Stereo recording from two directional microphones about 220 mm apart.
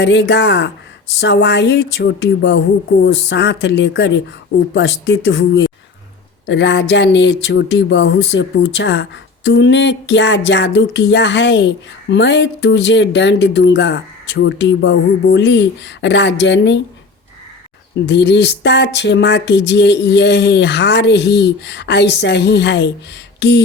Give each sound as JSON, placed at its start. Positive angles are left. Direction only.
{"t": 0.0, "sound": "speech", "side_deg": 50}
{"t": 18.0, "sound": "speech", "side_deg": 50}
{"t": 23.4, "sound": "a sound", "side_deg": 50}